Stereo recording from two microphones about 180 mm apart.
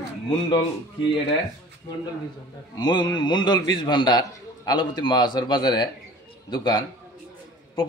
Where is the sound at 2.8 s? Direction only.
25° left (ahead or behind).